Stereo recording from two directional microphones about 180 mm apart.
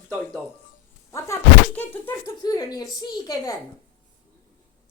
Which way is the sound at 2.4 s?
20° left (ahead or behind).